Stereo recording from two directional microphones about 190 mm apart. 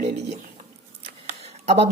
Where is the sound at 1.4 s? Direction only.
30° right (ahead or behind).